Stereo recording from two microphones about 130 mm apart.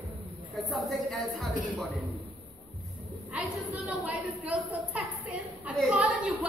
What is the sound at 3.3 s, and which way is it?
A woman's voice, 10° right (ahead or behind).